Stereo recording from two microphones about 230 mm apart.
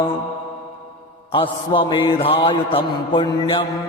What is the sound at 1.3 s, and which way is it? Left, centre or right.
Mantra, left.